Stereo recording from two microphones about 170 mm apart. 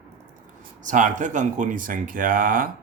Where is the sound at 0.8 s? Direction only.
45° right (ahead or behind).